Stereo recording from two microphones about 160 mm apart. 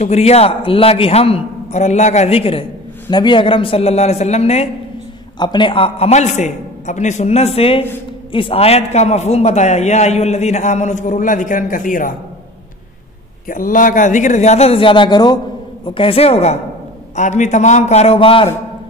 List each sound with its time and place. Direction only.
0.0 s a man's voice: 40° left (ahead or behind)
5.4 s a man's voice: 30° left (ahead or behind); by 12.1 s 55° left (ahead or behind)
13.5 s a man's voice: 55° left (ahead or behind); by 18.5 s 35° left (ahead or behind)